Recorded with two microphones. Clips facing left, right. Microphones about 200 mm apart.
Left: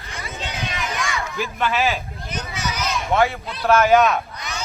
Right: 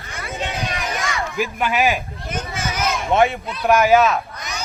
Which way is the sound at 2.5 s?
50° right (ahead or behind).